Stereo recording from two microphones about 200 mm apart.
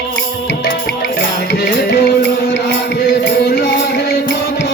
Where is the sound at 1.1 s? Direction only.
60° left (ahead or behind).